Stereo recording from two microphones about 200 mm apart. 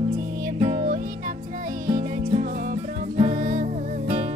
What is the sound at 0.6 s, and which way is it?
Music, 35° right (ahead or behind).